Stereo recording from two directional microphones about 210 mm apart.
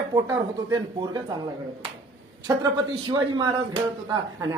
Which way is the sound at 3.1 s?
20° right (ahead or behind).